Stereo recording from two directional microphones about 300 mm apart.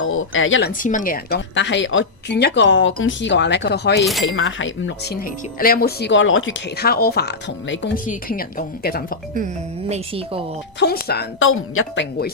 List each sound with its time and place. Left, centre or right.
0.0 s speech: left
0.7 s speech: left
4.0 s speech: centre
4.3 s speech: left
9.9 s a woman's voice: centre
10.8 s speech: left